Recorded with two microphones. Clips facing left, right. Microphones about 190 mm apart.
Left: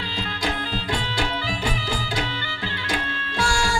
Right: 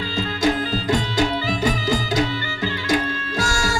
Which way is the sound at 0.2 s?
40° right (ahead or behind).